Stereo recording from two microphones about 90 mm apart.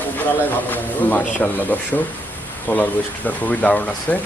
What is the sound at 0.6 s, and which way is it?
Speech, 20° left (ahead or behind).